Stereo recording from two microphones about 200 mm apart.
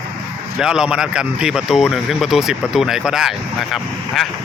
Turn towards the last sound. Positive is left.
turn(degrees=0)  # may be behind; listen again after turning